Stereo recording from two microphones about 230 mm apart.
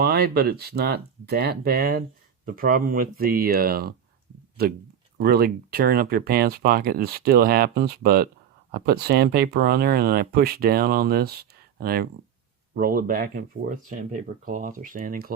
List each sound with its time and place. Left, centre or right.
0.0 s speech: right
5.1 s speech: right